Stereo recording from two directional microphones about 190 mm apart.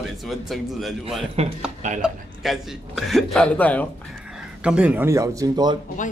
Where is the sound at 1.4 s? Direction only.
30° right (ahead or behind).